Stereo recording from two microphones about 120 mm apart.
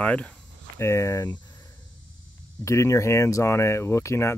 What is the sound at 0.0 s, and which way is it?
Speech, 10° left (ahead or behind).